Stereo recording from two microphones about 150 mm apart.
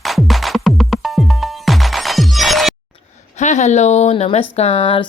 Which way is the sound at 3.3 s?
50° left (ahead or behind).